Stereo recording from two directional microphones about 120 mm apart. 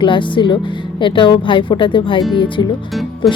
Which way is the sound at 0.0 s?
45° left (ahead or behind).